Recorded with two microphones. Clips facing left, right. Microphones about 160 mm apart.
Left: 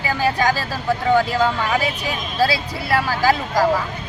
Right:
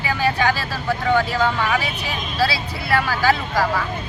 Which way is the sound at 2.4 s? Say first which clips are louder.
Left 3 dB; 45° left (ahead or behind).